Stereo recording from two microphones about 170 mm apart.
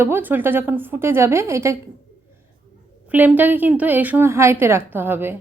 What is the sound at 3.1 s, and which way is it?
A woman's voice, 10° right (ahead or behind).